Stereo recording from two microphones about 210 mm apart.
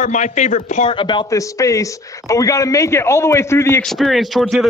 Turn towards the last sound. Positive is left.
turn(degrees=0)  # may be behind; listen again after turning